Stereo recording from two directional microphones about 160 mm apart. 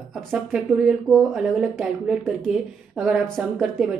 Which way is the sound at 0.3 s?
5° right (ahead or behind).